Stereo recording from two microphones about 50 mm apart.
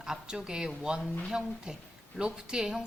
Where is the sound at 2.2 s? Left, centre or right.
Centre.